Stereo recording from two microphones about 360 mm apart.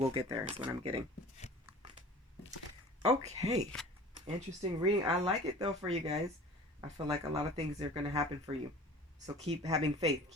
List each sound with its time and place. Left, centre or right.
0.0 s speech: centre
3.0 s speech: centre